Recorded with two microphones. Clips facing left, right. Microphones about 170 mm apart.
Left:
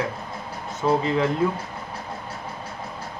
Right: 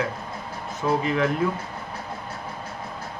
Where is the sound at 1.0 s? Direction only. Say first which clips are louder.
Left 1 dB; 25° left (ahead or behind).